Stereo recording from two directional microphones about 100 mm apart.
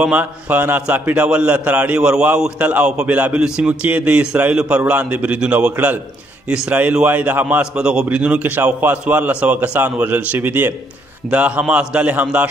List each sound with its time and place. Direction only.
0.0 s a man's voice: 15° right (ahead or behind)
7.7 s a man's voice: 10° right (ahead or behind)